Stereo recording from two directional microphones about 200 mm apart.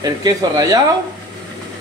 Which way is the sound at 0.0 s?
20° right (ahead or behind).